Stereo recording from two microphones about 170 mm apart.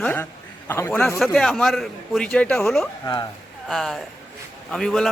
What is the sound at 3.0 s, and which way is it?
Speech, 25° left (ahead or behind).